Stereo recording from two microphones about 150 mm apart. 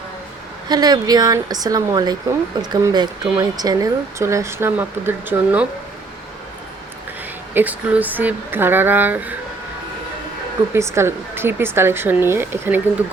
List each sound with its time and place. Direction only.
0.7 s speech: 25° right (ahead or behind)
7.5 s speech: 10° right (ahead or behind)
10.8 s speech: 20° right (ahead or behind)